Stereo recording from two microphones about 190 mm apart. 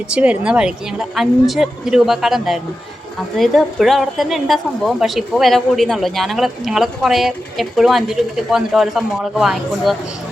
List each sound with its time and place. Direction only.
0.1 s a woman's voice: 5° right (ahead or behind)